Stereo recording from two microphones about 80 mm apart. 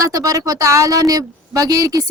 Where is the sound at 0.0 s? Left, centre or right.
Right.